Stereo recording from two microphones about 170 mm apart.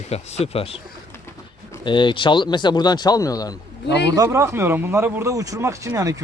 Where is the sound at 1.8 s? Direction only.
30° left (ahead or behind).